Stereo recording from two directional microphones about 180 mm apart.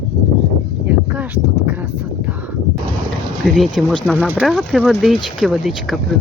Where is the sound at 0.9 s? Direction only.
10° right (ahead or behind).